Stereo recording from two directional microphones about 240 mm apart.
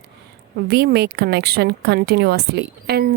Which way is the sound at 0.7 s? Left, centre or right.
Right.